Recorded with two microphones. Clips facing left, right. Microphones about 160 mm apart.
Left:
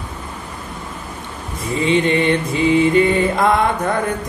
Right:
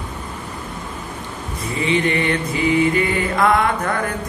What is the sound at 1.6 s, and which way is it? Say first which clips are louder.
Mantra: left 3 dB; 25° left (ahead or behind).